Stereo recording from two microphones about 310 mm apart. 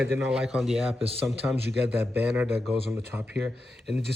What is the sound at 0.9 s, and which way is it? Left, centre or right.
Speech, centre.